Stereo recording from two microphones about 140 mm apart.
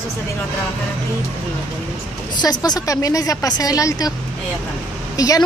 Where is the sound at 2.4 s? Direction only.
30° left (ahead or behind).